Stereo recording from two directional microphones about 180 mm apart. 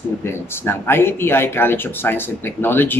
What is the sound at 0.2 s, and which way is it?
A man's voice, 15° left (ahead or behind).